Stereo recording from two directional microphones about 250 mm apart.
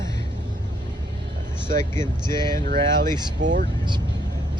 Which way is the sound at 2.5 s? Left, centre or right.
Right.